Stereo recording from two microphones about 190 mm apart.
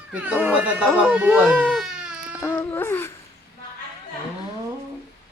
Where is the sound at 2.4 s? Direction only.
10° left (ahead or behind).